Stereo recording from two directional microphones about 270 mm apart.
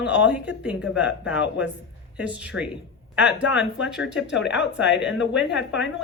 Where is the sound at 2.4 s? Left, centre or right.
Centre.